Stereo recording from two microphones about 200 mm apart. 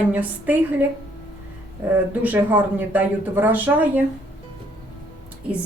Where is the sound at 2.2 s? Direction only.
10° right (ahead or behind).